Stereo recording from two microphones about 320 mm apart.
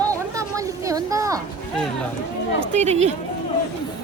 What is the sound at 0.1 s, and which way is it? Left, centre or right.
Children playing, centre.